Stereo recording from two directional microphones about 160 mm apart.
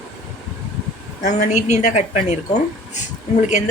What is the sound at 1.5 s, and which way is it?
A woman's voice, 45° left (ahead or behind).